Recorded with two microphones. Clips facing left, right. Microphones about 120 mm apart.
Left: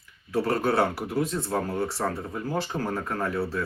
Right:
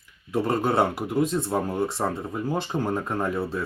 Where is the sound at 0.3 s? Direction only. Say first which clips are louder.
Right 1 dB; 20° right (ahead or behind).